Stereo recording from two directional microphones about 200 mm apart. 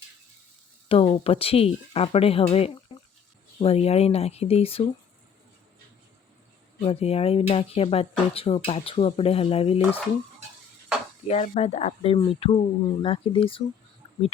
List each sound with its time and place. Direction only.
0.9 s speech: 25° left (ahead or behind)
6.7 s speech: 30° left (ahead or behind)
11.3 s speech: 35° left (ahead or behind)